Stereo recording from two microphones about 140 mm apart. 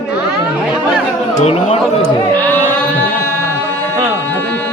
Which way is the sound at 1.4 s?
50° left (ahead or behind).